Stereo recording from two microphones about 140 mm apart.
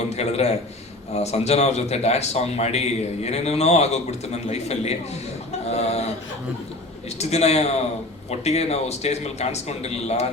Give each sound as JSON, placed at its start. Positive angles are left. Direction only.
{"t": 0.2, "sound": "a man's voice", "side_deg": 50}
{"t": 7.2, "sound": "a man's voice", "side_deg": 50}